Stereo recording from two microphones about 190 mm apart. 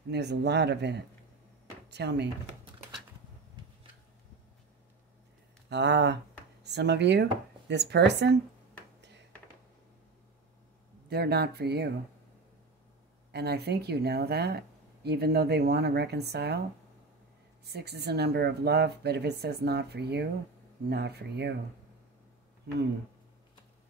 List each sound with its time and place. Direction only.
0.1 s speech: 60° right (ahead or behind)
3.6 s a sound: 25° right (ahead or behind)
5.7 s speech: 65° right (ahead or behind)
11.1 s speech: 60° right (ahead or behind)
13.3 s speech: 60° right (ahead or behind)
17.6 s speech: 60° right (ahead or behind)